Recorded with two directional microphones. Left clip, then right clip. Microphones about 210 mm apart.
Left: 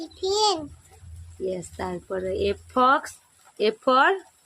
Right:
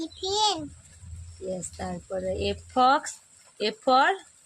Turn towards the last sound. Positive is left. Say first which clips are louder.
# left 2 dB
turn(degrees=35)  # may be behind; listen again after turning